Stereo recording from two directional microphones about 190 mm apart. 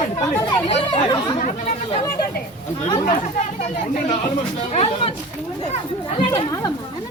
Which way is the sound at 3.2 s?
35° left (ahead or behind).